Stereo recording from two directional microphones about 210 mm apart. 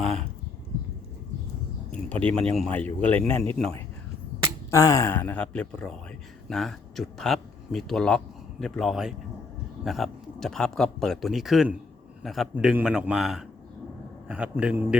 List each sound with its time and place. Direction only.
0.0 s a sound: 30° right (ahead or behind)
1.9 s speech: 5° left (ahead or behind)
4.7 s speech: 15° left (ahead or behind); by 14.9 s 5° right (ahead or behind)